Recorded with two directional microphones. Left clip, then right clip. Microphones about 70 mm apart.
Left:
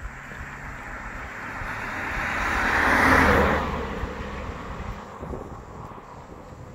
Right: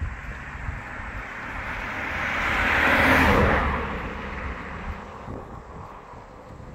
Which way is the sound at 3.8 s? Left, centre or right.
Right.